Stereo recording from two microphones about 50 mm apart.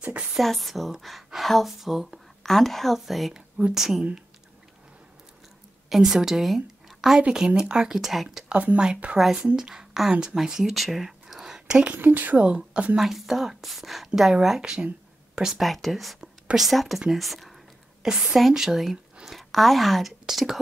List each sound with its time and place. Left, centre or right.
0.4 s speech: centre
3.3 s speech: centre
3.7 s speech: centre
5.9 s a woman's voice: centre
7.2 s speech: centre
8.5 s speech: right
9.6 s a woman's voice: centre
10.7 s a sound: centre
11.9 s speech: right
12.4 s a woman's voice: centre
12.9 s speech: centre
15.6 s speech: centre
18.0 s speech: centre